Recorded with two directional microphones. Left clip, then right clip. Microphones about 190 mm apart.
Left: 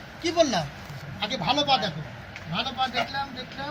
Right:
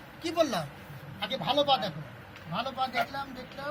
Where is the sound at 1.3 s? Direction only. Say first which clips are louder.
Left 3 dB; 25° right (ahead or behind).